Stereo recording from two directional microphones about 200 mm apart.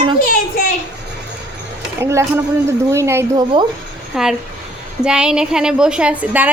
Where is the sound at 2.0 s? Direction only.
15° right (ahead or behind).